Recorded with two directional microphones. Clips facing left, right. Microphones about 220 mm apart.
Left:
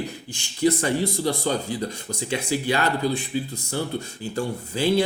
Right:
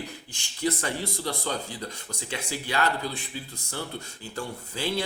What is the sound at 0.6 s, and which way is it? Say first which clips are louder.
Speech: left 8 dB; 15° left (ahead or behind).